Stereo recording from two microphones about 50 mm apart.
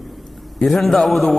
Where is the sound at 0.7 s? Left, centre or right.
Centre.